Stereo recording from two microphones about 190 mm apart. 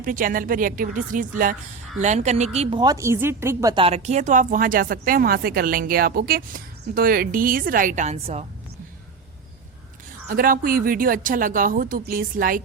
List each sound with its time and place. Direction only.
0.0 s a woman's voice: 45° right (ahead or behind); by 3.8 s 20° right (ahead or behind)
3.8 s speech: 35° right (ahead or behind)
10.2 s speech: 50° right (ahead or behind)